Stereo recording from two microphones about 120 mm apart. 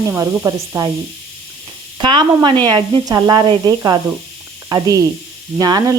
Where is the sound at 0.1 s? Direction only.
25° right (ahead or behind).